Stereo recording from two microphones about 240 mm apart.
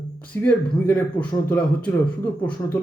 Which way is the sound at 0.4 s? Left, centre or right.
Centre.